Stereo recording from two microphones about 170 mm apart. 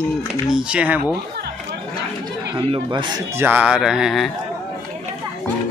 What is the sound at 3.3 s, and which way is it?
Speech, 10° right (ahead or behind).